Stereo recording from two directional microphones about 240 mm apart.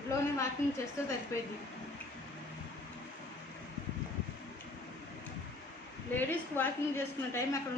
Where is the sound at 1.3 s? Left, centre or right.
Centre.